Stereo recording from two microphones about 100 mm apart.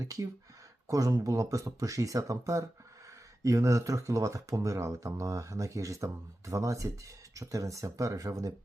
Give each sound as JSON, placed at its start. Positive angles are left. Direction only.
{"t": 0.0, "sound": "speech", "side_deg": -35}